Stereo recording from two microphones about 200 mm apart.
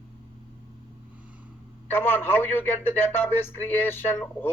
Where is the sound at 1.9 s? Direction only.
10° left (ahead or behind).